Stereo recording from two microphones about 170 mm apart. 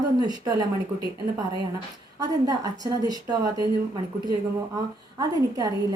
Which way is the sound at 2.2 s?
20° right (ahead or behind).